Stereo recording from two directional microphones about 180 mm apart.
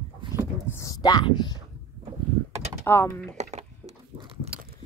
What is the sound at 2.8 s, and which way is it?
Speech, 10° left (ahead or behind).